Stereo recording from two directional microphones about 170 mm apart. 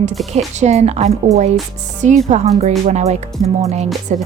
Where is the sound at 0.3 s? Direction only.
40° right (ahead or behind).